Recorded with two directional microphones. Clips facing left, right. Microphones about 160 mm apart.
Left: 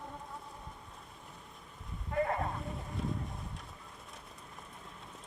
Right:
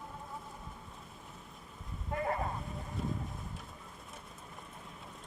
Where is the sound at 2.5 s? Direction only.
Centre (ahead or behind).